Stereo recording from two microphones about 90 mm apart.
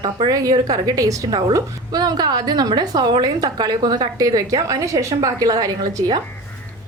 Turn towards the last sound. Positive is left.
turn(degrees=-45)  # may be behind; listen again after turning